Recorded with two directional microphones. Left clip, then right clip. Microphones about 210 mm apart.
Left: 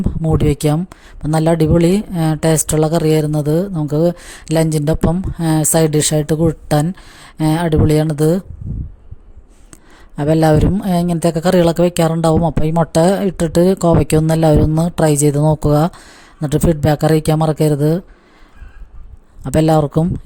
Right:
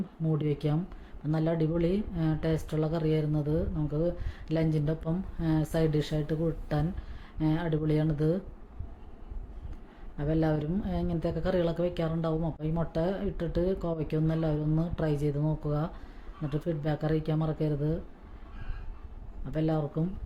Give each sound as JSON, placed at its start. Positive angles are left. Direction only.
{"t": 0.2, "sound": "speech", "side_deg": 50}
{"t": 10.2, "sound": "speech", "side_deg": 50}
{"t": 19.5, "sound": "speech", "side_deg": 50}